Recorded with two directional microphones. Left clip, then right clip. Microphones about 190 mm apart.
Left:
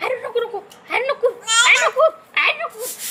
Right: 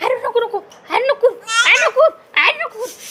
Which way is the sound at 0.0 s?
25° right (ahead or behind).